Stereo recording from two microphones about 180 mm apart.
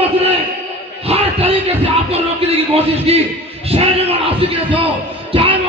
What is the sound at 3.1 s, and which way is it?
Speech, 35° right (ahead or behind).